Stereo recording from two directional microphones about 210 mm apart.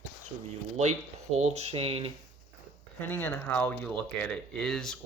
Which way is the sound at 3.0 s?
10° left (ahead or behind).